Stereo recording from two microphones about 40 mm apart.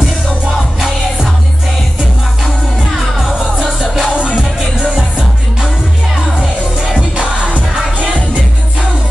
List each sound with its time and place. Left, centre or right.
3.0 s music: centre
6.3 s music: centre
7.5 s music: right